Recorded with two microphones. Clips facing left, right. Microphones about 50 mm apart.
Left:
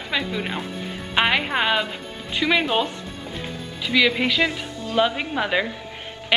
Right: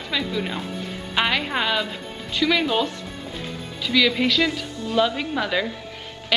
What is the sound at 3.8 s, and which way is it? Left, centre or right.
A woman's voice, centre.